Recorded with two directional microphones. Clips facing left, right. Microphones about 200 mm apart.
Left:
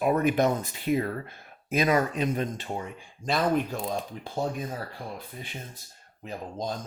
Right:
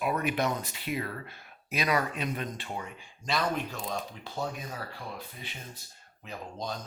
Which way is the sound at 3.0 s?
50° left (ahead or behind).